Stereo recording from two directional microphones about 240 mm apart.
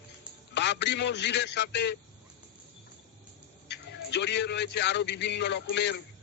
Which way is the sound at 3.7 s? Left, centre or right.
Left.